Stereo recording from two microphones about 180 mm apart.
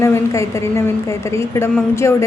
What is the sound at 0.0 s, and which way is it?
A woman's voice, 15° left (ahead or behind).